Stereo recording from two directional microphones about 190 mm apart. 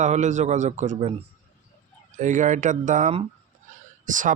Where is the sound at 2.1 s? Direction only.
40° right (ahead or behind).